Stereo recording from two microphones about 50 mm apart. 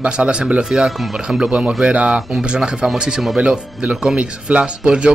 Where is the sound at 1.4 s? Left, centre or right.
Right.